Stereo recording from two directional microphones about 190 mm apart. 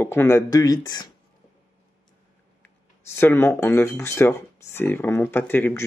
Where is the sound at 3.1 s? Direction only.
10° left (ahead or behind).